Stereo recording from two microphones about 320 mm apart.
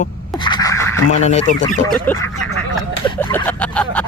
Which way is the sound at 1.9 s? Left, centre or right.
Centre.